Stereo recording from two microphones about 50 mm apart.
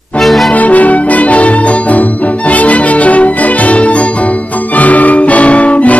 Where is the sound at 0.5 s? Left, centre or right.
Left.